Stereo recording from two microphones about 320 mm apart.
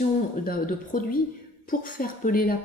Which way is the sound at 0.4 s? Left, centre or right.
Left.